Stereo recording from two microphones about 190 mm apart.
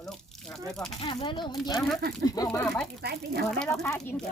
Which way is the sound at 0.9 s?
30° left (ahead or behind).